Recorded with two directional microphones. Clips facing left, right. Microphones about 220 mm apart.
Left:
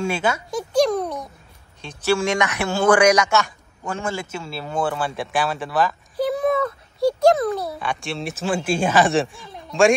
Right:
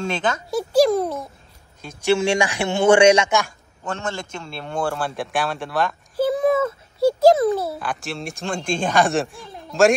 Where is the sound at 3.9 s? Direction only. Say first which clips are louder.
Left 1 dB; 10° left (ahead or behind).